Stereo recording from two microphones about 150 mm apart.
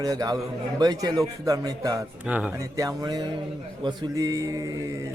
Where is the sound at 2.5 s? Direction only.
20° right (ahead or behind).